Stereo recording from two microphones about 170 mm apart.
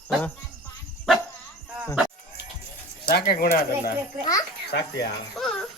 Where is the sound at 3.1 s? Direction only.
60° left (ahead or behind).